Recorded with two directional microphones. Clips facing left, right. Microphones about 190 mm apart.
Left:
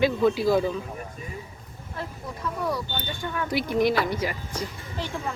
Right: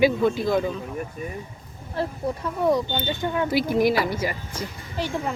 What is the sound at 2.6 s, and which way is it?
Speech, 20° right (ahead or behind).